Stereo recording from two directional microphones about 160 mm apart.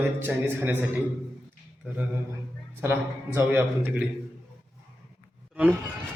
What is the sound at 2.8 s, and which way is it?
A man's voice, 15° right (ahead or behind).